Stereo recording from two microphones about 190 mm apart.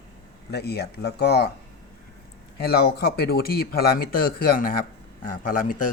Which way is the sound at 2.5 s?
60° left (ahead or behind).